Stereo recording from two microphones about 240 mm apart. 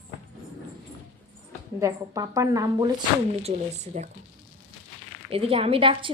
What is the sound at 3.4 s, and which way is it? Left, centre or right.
Speech, right.